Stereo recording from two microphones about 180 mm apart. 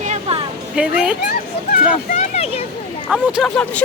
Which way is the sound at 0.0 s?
35° right (ahead or behind).